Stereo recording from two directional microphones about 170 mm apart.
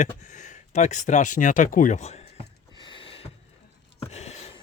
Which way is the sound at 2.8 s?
30° left (ahead or behind).